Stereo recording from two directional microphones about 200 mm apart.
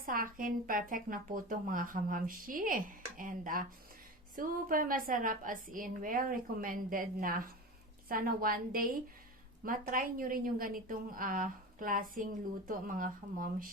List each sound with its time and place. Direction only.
0.0 s a woman's voice: 45° right (ahead or behind)